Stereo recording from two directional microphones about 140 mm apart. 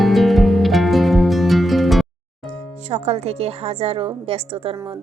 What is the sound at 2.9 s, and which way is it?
A woman's voice, 50° right (ahead or behind).